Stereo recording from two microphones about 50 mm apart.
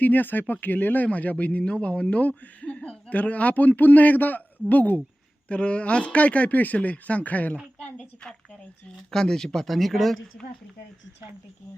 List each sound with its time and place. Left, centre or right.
0.0 s speech: left
7.9 s speech: centre